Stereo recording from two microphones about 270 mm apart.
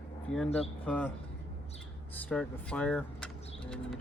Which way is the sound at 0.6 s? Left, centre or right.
Centre.